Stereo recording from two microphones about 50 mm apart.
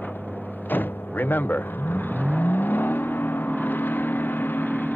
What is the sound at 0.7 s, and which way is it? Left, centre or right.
Vehicle, left.